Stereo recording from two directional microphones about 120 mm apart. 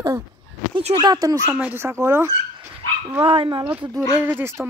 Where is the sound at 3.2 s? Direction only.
50° right (ahead or behind).